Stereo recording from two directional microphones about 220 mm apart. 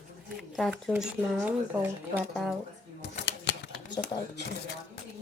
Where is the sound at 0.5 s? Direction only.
Centre (ahead or behind).